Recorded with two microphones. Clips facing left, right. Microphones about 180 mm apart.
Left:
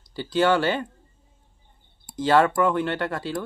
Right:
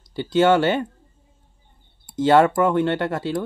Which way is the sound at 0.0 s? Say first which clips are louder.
Right 4 dB; 20° right (ahead or behind).